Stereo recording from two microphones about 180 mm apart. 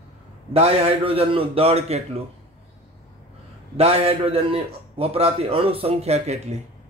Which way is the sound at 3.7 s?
35° right (ahead or behind).